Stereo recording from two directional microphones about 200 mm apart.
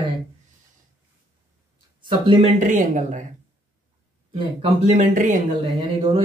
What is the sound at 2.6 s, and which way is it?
Speech, 40° right (ahead or behind).